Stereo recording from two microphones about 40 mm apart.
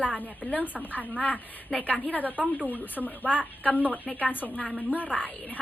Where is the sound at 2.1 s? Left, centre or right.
Left.